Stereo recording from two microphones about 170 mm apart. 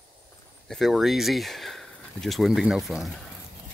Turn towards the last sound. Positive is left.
turn(degrees=0)  # may be behind; listen again after turning